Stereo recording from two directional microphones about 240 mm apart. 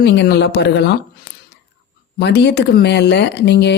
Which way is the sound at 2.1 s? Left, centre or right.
Left.